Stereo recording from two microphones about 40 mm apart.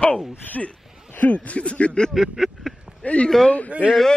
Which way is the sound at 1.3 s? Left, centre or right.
Left.